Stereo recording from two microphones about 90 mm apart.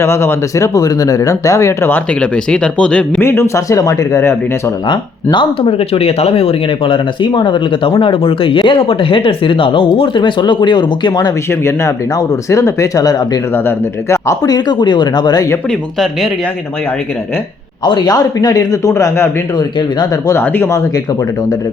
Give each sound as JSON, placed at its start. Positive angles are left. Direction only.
{"t": 0.0, "sound": "speech", "side_deg": 30}
{"t": 2.2, "sound": "speech", "side_deg": 10}
{"t": 3.2, "sound": "speech", "side_deg": 30}
{"t": 4.9, "sound": "speech", "side_deg": 65}
{"t": 11.6, "sound": "speech", "side_deg": 30}
{"t": 13.7, "sound": "speech", "side_deg": 30}
{"t": 14.4, "sound": "speech", "side_deg": 50}
{"t": 17.8, "sound": "a man's voice", "side_deg": 60}
{"t": 18.1, "sound": "speech", "side_deg": 45}
{"t": 19.5, "sound": "speech", "side_deg": 50}
{"t": 20.3, "sound": "speech", "side_deg": 20}